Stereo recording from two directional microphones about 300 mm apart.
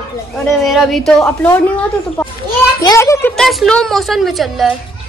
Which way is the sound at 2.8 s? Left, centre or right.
Centre.